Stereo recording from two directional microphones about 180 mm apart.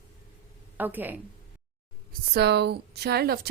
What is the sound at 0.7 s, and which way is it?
Speech, 10° right (ahead or behind).